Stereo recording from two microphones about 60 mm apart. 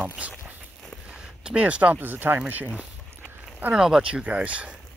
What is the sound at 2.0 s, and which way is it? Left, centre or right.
Speech, right.